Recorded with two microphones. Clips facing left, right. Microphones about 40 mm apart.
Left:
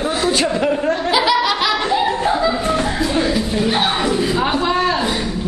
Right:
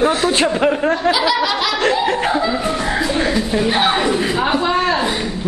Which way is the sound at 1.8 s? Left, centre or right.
Right.